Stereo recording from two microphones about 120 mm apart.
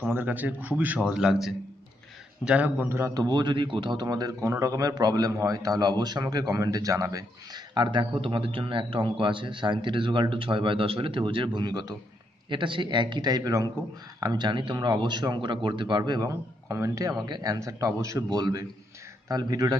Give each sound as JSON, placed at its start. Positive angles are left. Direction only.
{"t": 0.1, "sound": "a man's voice", "side_deg": -15}